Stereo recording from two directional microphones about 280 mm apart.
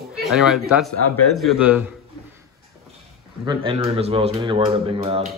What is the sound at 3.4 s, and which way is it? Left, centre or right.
Speech, centre.